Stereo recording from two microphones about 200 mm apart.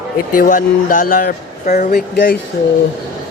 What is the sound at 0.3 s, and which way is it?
Speech, 45° left (ahead or behind).